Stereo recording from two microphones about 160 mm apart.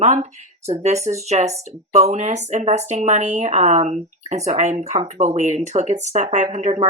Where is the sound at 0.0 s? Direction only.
45° right (ahead or behind).